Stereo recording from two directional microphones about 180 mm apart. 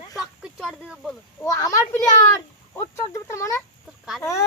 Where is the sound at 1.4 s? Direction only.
15° left (ahead or behind).